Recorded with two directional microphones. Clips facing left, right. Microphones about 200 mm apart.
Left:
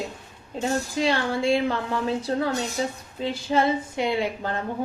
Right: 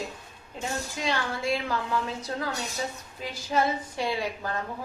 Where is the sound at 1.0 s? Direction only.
30° left (ahead or behind).